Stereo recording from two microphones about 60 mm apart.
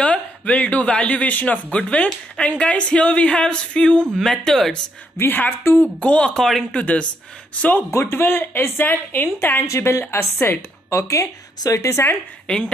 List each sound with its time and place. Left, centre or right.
0.0 s speech: left
4.1 s speech: centre
5.2 s speech: left
5.9 s speech: left
6.3 s speech: centre
6.7 s speech: centre
7.9 s speech: left
11.0 s a woman's voice: left
12.4 s speech: centre